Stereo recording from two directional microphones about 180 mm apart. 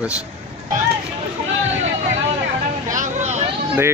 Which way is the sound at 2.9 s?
45° right (ahead or behind).